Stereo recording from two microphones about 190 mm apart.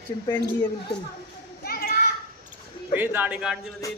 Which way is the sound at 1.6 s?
55° left (ahead or behind).